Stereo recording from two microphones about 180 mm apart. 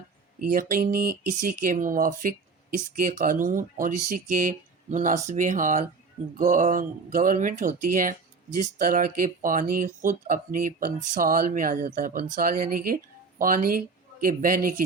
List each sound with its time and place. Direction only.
0.5 s speech: 50° right (ahead or behind)